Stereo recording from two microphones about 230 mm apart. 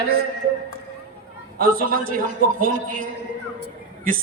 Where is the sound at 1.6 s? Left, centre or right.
Right.